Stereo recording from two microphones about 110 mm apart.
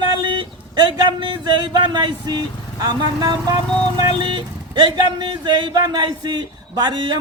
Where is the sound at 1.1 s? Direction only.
45° right (ahead or behind).